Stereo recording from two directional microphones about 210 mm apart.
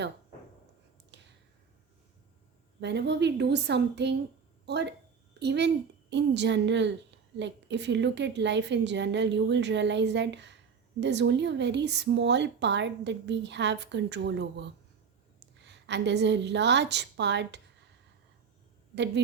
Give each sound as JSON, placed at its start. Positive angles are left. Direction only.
{"t": 2.8, "sound": "a woman's voice", "side_deg": -55}
{"t": 15.6, "sound": "a woman's voice", "side_deg": -55}